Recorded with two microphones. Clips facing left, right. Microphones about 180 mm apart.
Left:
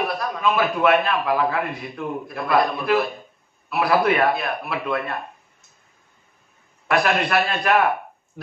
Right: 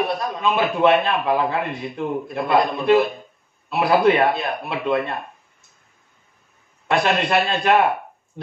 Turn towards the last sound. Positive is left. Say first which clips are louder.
# right 2 dB
turn(degrees=-25)  # may be behind; listen again after turning